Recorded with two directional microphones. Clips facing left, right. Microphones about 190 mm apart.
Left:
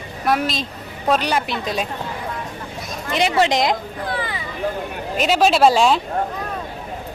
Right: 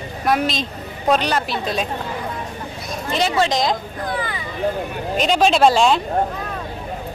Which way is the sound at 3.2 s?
20° left (ahead or behind).